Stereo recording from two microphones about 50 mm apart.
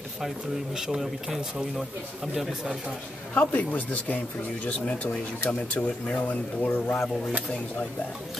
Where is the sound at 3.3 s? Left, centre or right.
Left.